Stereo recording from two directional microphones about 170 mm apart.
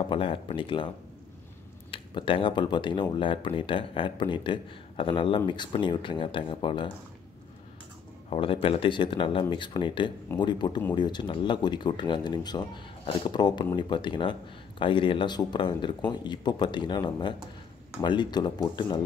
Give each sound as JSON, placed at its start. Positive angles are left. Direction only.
{"t": 0.0, "sound": "speech", "side_deg": 30}
{"t": 1.9, "sound": "speech", "side_deg": 30}
{"t": 8.3, "sound": "speech", "side_deg": 30}